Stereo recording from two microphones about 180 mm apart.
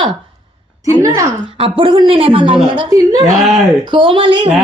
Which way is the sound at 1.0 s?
15° right (ahead or behind).